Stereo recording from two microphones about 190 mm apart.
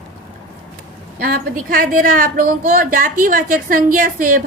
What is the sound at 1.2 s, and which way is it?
A woman's voice, 50° right (ahead or behind).